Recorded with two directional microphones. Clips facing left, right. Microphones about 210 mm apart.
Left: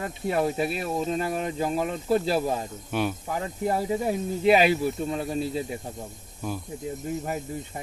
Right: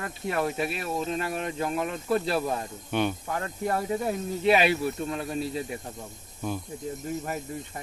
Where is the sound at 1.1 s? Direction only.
30° left (ahead or behind).